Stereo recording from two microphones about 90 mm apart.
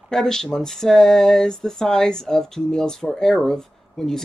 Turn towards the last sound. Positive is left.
turn(degrees=5)  # may be behind; listen again after turning